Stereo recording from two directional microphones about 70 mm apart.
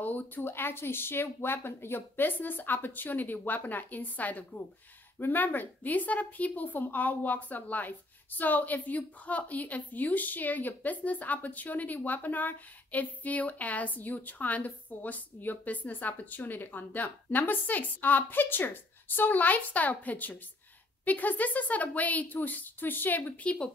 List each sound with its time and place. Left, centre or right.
0.0 s a woman's voice: left